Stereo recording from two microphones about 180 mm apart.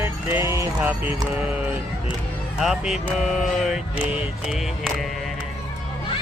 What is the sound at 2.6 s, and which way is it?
Speech, centre (ahead or behind).